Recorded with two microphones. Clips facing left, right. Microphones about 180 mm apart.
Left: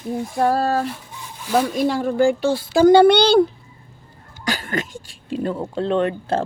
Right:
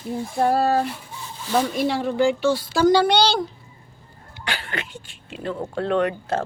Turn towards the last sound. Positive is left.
turn(degrees=30)  # may be behind; listen again after turning